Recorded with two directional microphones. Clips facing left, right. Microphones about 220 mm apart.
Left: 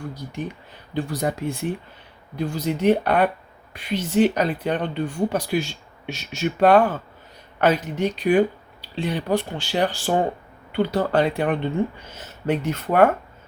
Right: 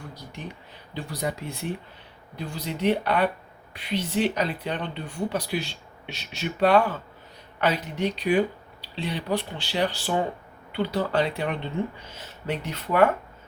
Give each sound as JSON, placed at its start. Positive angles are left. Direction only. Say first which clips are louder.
{"t": 0.9, "sound": "speech", "louder": "left 6 dB", "side_deg": 50}